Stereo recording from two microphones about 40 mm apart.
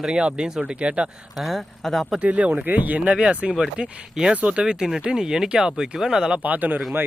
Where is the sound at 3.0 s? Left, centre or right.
Right.